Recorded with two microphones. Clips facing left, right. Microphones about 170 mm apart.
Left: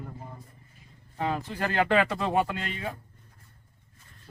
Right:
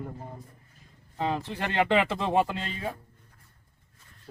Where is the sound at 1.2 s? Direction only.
25° right (ahead or behind).